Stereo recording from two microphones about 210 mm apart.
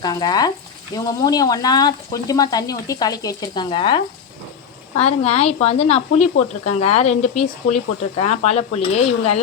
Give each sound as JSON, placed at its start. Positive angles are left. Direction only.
{"t": 0.0, "sound": "frying", "side_deg": 20}
{"t": 4.9, "sound": "speech", "side_deg": 30}